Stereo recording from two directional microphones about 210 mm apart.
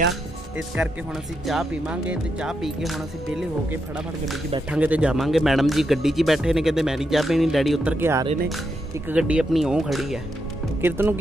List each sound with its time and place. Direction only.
0.8 s speech: 10° right (ahead or behind)